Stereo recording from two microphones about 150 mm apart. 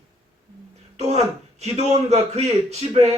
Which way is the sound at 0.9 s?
45° right (ahead or behind).